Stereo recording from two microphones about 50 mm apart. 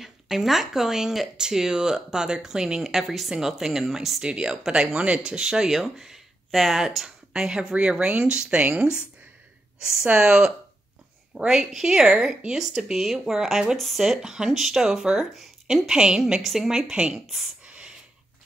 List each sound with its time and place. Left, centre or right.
0.0 s speech: centre
4.2 s speech: centre
8.5 s speech: right
9.8 s speech: centre
16.9 s speech: right
17.6 s a sound: right